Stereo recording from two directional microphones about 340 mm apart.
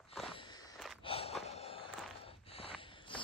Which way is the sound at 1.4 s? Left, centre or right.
Centre.